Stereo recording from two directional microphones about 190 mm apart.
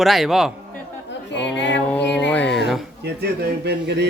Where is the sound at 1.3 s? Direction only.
65° left (ahead or behind).